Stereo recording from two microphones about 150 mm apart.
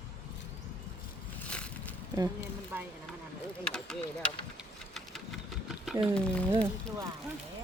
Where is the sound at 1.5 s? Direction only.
10° left (ahead or behind).